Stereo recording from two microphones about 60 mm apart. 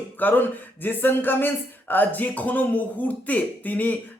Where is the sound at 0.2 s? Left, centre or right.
Left.